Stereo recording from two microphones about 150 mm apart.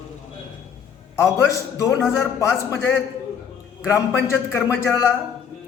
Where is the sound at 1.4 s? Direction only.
20° left (ahead or behind).